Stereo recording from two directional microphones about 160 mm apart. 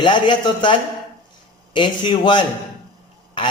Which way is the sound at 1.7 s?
30° left (ahead or behind).